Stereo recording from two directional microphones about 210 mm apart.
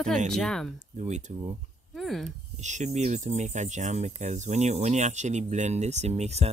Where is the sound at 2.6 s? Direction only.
35° right (ahead or behind).